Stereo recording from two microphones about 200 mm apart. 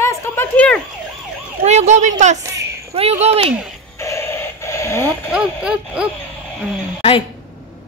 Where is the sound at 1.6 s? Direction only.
35° right (ahead or behind).